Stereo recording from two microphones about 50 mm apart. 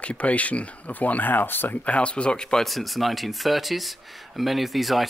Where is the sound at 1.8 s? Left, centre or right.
Left.